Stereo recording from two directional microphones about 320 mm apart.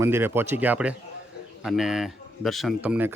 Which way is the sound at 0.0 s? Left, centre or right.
Centre.